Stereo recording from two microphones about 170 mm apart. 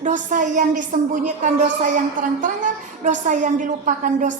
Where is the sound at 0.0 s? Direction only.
50° right (ahead or behind).